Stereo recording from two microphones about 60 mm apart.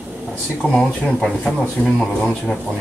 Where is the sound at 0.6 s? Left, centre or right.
Centre.